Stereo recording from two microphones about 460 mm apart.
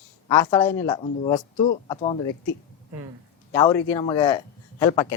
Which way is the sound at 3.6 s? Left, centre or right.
Centre.